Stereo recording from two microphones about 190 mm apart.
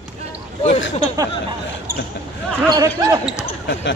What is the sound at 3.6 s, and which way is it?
Speech, 65° left (ahead or behind).